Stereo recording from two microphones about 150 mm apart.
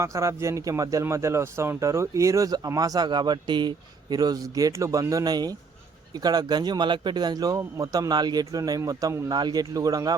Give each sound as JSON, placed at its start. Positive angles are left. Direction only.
{"t": 0.0, "sound": "speech", "side_deg": -20}